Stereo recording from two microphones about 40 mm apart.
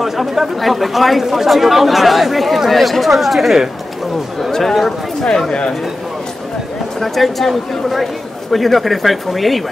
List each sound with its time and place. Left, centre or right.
0.0 s speech: centre
4.4 s speech: centre
5.5 s speech: left
7.0 s speech: centre